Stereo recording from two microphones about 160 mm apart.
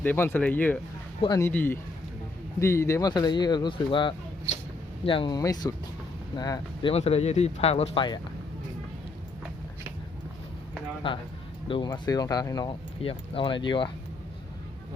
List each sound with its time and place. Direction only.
0.0 s speech: 10° left (ahead or behind)
6.9 s speech: 40° left (ahead or behind)
11.0 s speech: 35° left (ahead or behind)